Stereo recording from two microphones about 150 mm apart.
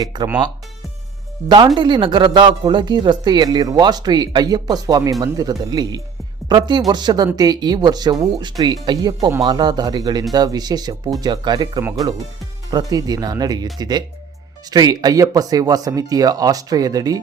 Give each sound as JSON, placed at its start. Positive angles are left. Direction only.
{"t": 0.0, "sound": "speech", "side_deg": -30}
{"t": 1.5, "sound": "speech", "side_deg": -30}